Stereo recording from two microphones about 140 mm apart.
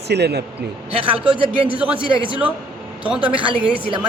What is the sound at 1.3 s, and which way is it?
Speech, 40° right (ahead or behind).